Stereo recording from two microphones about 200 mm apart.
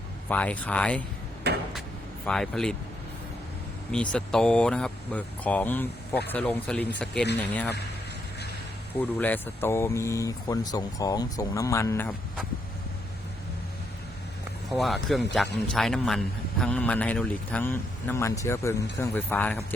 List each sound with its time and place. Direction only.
0.3 s a man's voice: 5° left (ahead or behind)
1.5 s a sound: 55° right (ahead or behind)
2.2 s speech: centre (ahead or behind)
3.9 s speech: 5° left (ahead or behind)
9.0 s a man's voice: 10° left (ahead or behind)
14.7 s a man's voice: centre (ahead or behind)